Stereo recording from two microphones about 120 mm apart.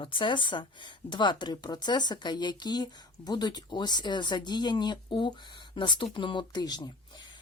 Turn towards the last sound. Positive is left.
turn(degrees=35)  # may be behind; listen again after turning